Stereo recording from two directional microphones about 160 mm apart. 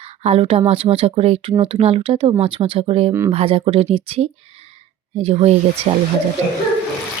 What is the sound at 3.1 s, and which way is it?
Speech, 15° right (ahead or behind).